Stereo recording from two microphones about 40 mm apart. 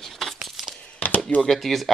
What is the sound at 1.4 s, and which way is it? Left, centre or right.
Speech, centre.